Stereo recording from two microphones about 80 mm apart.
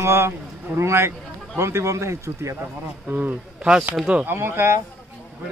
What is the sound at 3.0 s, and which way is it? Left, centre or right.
Speech, right.